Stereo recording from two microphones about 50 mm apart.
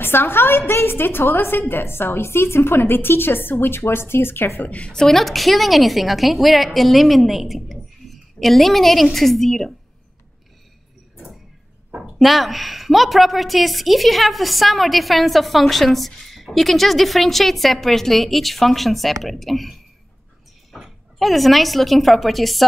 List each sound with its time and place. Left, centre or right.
0.0 s a woman's voice: left
4.6 s a woman's voice: left
4.9 s a woman's voice: centre
12.0 s a woman's voice: centre